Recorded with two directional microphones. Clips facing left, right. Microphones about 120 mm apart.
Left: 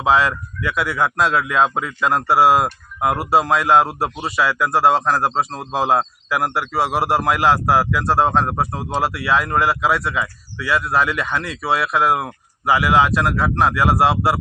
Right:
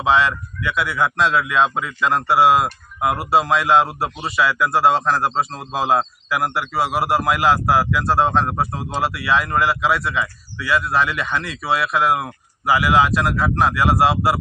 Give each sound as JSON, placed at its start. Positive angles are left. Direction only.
{"t": 0.0, "sound": "speech", "side_deg": 5}